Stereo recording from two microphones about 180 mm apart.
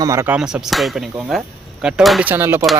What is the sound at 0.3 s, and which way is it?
Speech, 5° right (ahead or behind).